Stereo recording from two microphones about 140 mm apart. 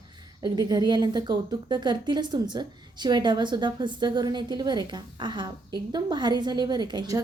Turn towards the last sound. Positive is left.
turn(degrees=-30)  # may be behind; listen again after turning